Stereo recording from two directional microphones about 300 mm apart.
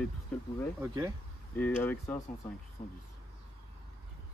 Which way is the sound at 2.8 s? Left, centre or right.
Left.